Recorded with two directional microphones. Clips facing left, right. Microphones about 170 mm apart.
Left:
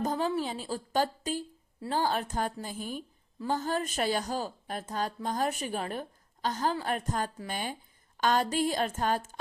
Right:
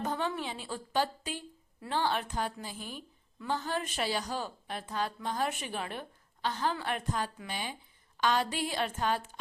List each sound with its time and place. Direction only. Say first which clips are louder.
0.0 s a woman's voice: left 4 dB; 35° left (ahead or behind)